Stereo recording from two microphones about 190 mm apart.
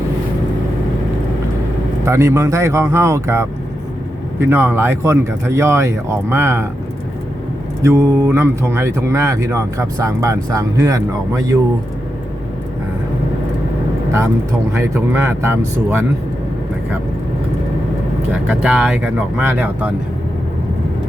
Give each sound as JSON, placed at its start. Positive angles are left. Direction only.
{"t": 2.0, "sound": "speech", "side_deg": -15}
{"t": 7.8, "sound": "speech", "side_deg": -15}
{"t": 14.8, "sound": "speech", "side_deg": -15}
{"t": 18.4, "sound": "speech", "side_deg": -5}